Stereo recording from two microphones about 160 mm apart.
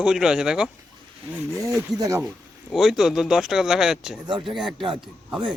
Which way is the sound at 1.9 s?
20° right (ahead or behind).